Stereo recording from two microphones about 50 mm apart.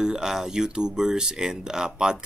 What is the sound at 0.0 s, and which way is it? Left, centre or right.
Speech, centre.